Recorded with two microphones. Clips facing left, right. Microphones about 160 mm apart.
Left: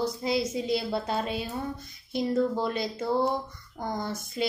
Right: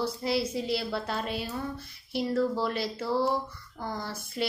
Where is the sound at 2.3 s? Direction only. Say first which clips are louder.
Left 1 dB; 20° left (ahead or behind).